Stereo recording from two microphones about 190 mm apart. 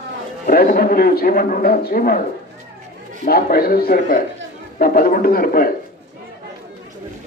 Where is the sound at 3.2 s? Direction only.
50° left (ahead or behind).